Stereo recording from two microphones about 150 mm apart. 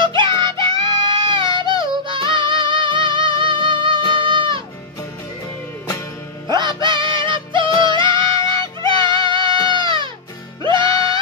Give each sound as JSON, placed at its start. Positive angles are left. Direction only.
{"t": 0.0, "sound": "music", "side_deg": -30}
{"t": 6.5, "sound": "music", "side_deg": -30}